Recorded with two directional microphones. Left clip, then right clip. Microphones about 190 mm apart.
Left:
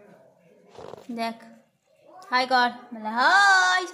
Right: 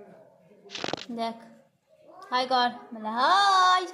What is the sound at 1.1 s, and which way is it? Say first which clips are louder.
A woman's voice: left 2 dB; 10° left (ahead or behind).